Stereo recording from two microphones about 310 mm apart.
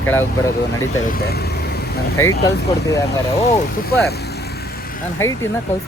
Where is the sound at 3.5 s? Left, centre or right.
Left.